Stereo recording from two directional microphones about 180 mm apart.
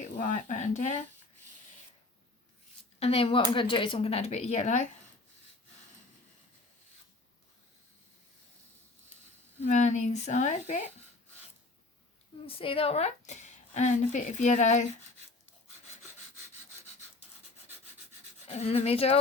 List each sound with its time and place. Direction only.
0.0 s a woman's voice: 40° left (ahead or behind)
3.0 s a woman's voice: 30° left (ahead or behind)
9.6 s a woman's voice: 40° left (ahead or behind)
12.5 s a woman's voice: 30° left (ahead or behind)
18.4 s a woman's voice: 35° left (ahead or behind)